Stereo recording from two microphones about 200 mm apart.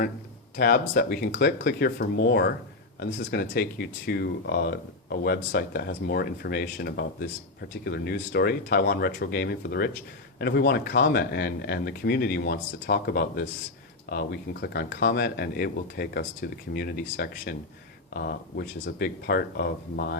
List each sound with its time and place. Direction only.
0.5 s speech: 50° left (ahead or behind)